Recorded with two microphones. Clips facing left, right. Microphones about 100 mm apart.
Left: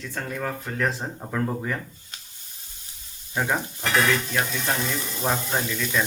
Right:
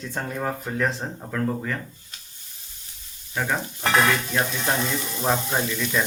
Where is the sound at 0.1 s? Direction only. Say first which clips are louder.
Right 2 dB; 20° right (ahead or behind).